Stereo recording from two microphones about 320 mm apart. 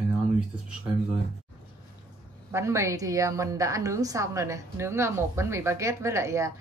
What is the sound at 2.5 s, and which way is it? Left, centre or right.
A woman's voice, centre.